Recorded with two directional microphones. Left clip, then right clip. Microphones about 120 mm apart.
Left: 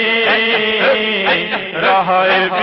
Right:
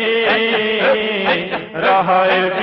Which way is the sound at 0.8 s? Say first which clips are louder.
Left 2 dB; 30° left (ahead or behind).